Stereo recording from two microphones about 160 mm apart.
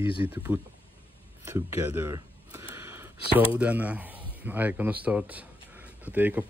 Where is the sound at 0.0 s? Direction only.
35° left (ahead or behind).